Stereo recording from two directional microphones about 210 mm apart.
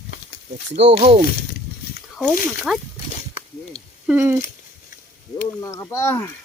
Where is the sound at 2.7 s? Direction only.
5° right (ahead or behind).